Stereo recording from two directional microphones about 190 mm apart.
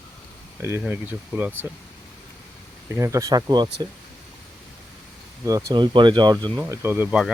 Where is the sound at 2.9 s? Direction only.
15° right (ahead or behind).